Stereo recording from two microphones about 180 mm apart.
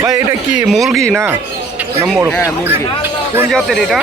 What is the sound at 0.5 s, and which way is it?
Speech, 5° right (ahead or behind).